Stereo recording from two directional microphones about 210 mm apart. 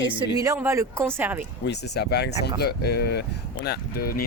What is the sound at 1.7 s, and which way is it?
Speech, 50° left (ahead or behind).